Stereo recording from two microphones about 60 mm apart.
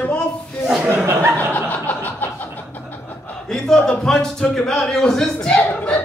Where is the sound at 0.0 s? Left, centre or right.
Left.